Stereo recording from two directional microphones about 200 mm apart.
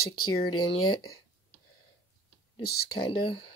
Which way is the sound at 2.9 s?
25° left (ahead or behind).